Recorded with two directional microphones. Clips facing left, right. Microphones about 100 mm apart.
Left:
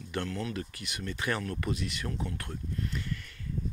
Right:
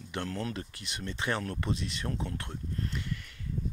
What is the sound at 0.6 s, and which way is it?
Speech, 30° right (ahead or behind).